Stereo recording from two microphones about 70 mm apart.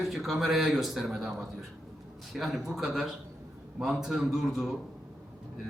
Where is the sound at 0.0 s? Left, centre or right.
Centre.